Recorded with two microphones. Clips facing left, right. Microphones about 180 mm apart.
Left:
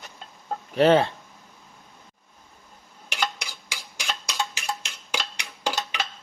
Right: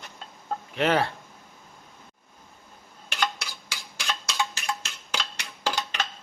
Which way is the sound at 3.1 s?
10° left (ahead or behind).